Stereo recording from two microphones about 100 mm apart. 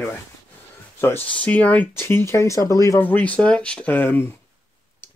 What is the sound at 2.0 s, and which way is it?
Speech, 25° left (ahead or behind).